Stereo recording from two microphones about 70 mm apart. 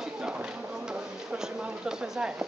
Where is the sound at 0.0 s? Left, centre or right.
Centre.